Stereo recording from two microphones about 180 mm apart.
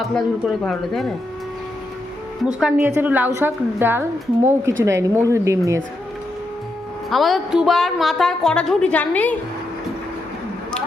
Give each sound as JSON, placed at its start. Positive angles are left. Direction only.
{"t": 0.0, "sound": "speech", "side_deg": 0}
{"t": 2.4, "sound": "a woman's voice", "side_deg": -5}
{"t": 7.1, "sound": "speech", "side_deg": 0}